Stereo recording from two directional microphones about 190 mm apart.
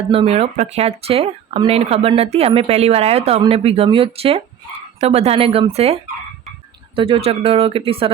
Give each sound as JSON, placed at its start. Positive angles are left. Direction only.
{"t": 0.1, "sound": "speech", "side_deg": -30}